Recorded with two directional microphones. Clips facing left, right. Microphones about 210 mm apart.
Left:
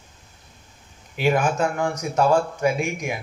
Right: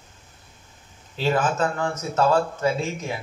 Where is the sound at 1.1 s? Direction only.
15° left (ahead or behind).